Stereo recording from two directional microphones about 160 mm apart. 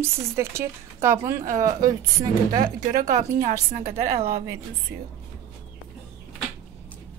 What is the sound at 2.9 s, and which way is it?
Speech, 50° right (ahead or behind).